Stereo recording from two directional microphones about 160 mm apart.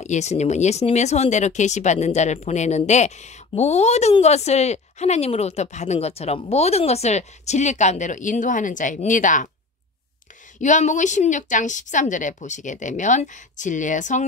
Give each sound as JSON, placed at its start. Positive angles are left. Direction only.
{"t": 0.0, "sound": "speech", "side_deg": 45}
{"t": 10.6, "sound": "speech", "side_deg": 50}